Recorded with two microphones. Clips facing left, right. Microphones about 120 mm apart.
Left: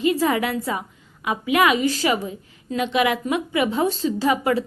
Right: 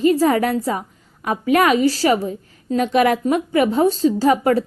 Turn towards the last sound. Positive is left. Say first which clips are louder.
# right 4 dB
turn(degrees=-40)  # may be behind; listen again after turning